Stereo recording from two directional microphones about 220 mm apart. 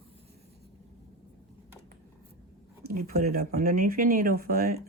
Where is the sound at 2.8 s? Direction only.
45° right (ahead or behind).